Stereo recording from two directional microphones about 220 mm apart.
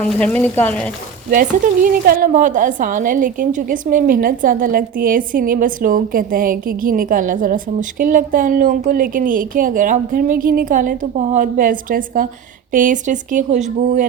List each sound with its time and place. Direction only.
0.0 s speech: 5° left (ahead or behind)
1.3 s a woman's voice: 40° right (ahead or behind)